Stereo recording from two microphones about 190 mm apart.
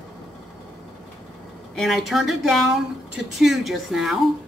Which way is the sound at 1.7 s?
Centre (ahead or behind).